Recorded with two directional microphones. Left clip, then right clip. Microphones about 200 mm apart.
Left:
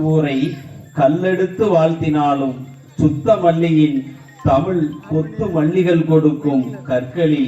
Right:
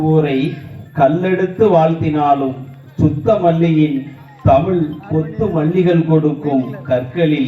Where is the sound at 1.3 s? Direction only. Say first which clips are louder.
Right 3 dB; 35° left (ahead or behind).